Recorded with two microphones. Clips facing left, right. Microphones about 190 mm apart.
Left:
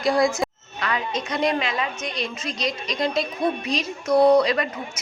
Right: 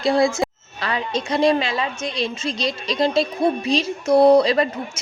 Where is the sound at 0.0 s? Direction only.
25° right (ahead or behind).